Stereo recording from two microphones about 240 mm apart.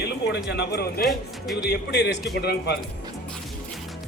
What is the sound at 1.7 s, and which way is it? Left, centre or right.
A man's voice, left.